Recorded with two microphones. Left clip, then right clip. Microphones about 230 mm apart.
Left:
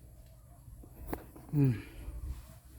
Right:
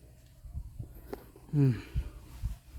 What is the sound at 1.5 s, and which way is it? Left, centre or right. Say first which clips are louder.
Speech: right 1 dB; centre.